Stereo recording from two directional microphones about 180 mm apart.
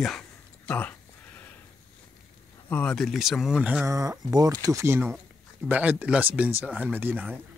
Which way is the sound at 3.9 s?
20° right (ahead or behind).